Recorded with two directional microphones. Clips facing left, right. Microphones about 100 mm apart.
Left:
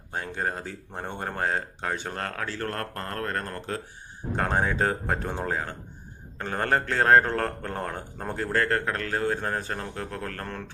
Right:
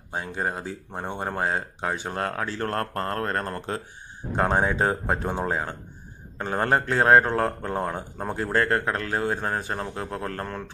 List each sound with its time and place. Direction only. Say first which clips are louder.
0.1 s speech: right 1 dB; 15° right (ahead or behind)
2.7 s speech: right 5 dB; 35° right (ahead or behind)